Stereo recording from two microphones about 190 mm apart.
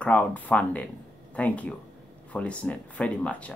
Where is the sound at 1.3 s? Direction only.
5° left (ahead or behind).